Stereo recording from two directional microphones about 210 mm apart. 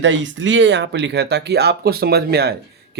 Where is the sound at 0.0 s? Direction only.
60° right (ahead or behind).